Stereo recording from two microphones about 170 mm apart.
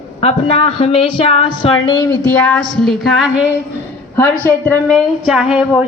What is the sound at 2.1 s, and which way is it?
A woman's voice, 5° left (ahead or behind).